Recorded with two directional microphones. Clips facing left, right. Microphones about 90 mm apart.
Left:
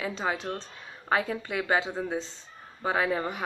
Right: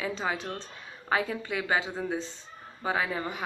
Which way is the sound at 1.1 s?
40° left (ahead or behind).